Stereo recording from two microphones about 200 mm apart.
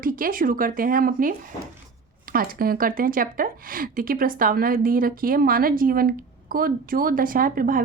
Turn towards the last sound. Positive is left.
turn(degrees=-45)  # may be behind; listen again after turning